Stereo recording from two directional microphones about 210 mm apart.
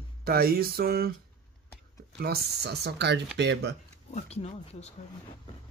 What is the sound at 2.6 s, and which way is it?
Speech, 50° right (ahead or behind).